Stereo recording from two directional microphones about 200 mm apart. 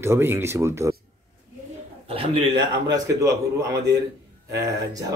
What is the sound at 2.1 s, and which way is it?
A man's voice, 25° right (ahead or behind).